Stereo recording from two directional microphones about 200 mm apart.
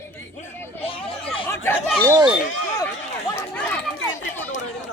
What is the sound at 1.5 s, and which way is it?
Speech, 10° left (ahead or behind).